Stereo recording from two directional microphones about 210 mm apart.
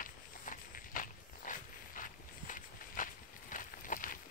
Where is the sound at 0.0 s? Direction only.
40° left (ahead or behind).